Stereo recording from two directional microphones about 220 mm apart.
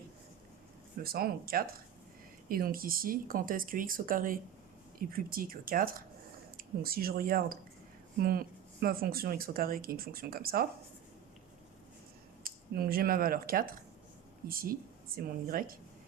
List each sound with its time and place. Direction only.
1.0 s speech: 45° right (ahead or behind)
12.4 s speech: 40° right (ahead or behind)